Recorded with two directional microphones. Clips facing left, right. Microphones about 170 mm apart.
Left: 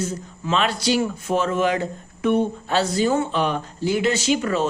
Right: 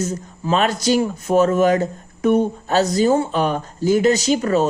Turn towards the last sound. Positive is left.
turn(degrees=-40)  # may be behind; listen again after turning